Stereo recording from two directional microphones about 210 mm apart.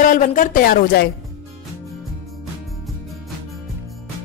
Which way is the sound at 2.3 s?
Centre (ahead or behind).